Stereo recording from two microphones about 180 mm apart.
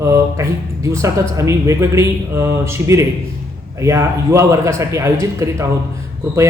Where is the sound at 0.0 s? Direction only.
15° right (ahead or behind).